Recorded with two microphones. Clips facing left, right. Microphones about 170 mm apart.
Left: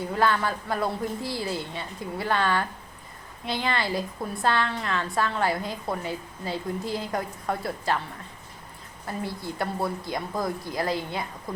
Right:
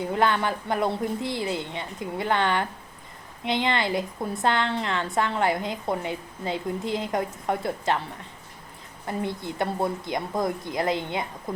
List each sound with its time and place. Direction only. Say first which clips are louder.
0.0 s a woman's voice: right 1 dB; 20° right (ahead or behind)
9.0 s a woman's voice: right 3 dB; 20° right (ahead or behind)